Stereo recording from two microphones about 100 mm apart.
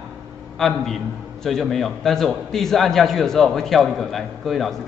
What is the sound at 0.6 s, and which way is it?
A man's voice, 5° left (ahead or behind).